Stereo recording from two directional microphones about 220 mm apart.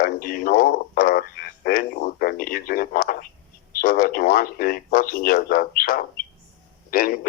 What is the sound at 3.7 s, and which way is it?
Radio, 40° left (ahead or behind).